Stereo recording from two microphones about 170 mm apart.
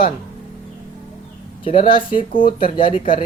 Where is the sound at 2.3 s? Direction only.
55° left (ahead or behind).